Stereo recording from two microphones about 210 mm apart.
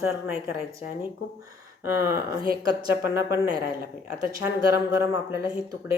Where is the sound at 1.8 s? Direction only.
15° right (ahead or behind).